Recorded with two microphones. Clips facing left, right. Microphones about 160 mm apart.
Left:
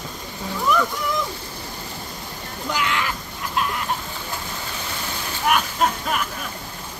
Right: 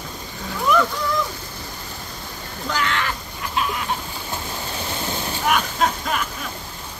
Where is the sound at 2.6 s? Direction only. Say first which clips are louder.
Even; 10° left (ahead or behind).